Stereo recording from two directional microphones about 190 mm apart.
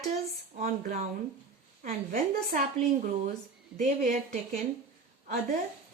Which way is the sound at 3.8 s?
40° right (ahead or behind).